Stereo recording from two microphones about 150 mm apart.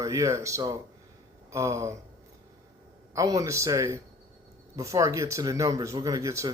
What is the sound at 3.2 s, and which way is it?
Speech, 20° right (ahead or behind).